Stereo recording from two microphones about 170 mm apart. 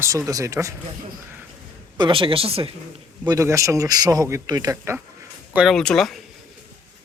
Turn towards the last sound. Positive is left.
turn(degrees=0)  # may be behind; listen again after turning